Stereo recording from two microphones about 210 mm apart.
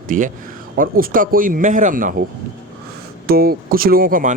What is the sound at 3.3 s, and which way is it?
Speech, 45° right (ahead or behind).